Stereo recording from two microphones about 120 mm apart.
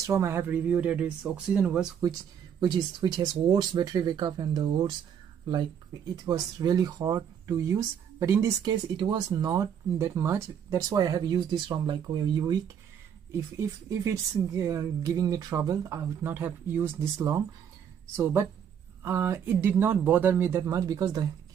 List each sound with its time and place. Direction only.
0.0 s speech: 25° right (ahead or behind)
0.5 s speech: 10° right (ahead or behind)
2.6 s speech: 35° right (ahead or behind)
6.2 s speech: 30° right (ahead or behind)
8.6 s speech: 40° right (ahead or behind)
13.6 s speech: 25° right (ahead or behind)